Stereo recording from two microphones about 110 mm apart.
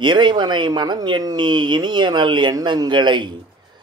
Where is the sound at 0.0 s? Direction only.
45° right (ahead or behind).